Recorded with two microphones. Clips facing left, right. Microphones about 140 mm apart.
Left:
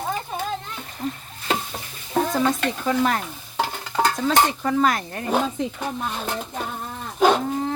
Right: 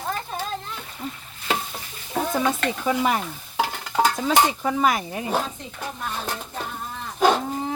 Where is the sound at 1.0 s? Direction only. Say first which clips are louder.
Left 5 dB; 40° left (ahead or behind).